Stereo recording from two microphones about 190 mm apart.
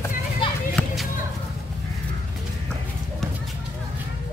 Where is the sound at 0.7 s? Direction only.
Centre (ahead or behind).